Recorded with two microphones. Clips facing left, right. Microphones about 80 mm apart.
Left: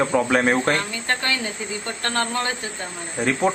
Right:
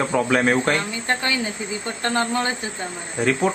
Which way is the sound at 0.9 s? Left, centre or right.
Centre.